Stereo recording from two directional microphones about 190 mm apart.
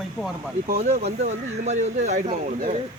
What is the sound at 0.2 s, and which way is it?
Speech, centre (ahead or behind).